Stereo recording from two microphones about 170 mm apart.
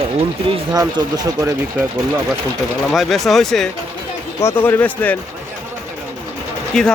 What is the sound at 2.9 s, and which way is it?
Speech, centre (ahead or behind).